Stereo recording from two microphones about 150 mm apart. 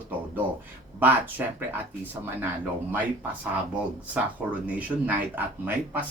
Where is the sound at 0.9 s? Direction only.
10° right (ahead or behind).